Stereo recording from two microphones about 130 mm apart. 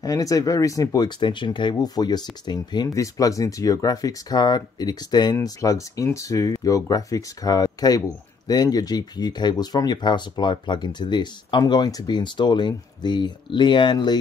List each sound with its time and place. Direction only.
0.0 s speech: 25° left (ahead or behind)